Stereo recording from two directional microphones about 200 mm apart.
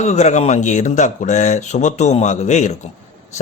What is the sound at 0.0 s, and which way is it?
Speech, 35° left (ahead or behind).